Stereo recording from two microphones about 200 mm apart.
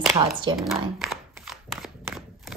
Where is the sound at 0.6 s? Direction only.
Centre (ahead or behind).